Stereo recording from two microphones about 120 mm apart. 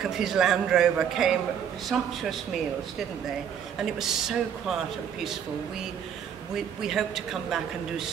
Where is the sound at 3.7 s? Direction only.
5° right (ahead or behind).